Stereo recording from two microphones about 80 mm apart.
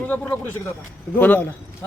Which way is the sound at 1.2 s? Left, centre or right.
Left.